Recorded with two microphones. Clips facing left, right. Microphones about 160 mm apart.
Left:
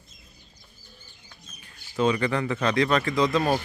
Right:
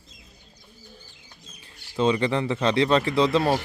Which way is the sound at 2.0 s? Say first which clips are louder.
Right 1 dB; 25° right (ahead or behind).